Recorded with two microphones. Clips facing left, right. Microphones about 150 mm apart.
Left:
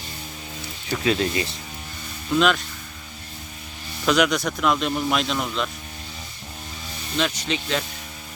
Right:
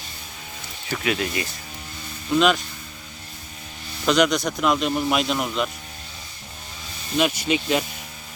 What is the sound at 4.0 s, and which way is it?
Speech, 5° left (ahead or behind).